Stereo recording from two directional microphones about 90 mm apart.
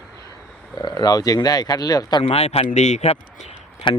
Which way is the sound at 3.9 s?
65° left (ahead or behind).